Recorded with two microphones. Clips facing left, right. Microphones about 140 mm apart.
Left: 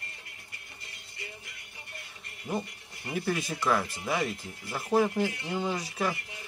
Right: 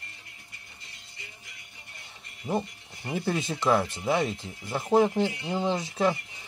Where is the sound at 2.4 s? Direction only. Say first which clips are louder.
Right 4 dB; 20° right (ahead or behind).